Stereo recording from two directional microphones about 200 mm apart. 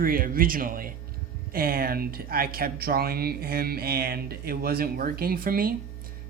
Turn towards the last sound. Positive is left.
turn(degrees=-45)  # may be behind; listen again after turning